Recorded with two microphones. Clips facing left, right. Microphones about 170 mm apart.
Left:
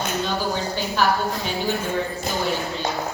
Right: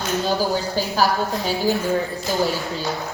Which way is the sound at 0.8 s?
35° right (ahead or behind).